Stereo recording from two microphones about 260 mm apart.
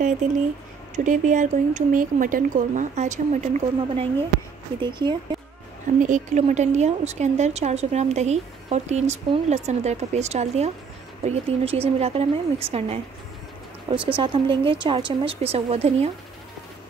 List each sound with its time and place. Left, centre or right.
0.2 s speech: right
5.9 s speech: right